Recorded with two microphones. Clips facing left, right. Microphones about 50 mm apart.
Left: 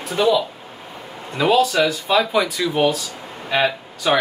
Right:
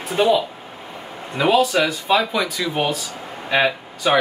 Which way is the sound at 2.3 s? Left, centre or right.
Centre.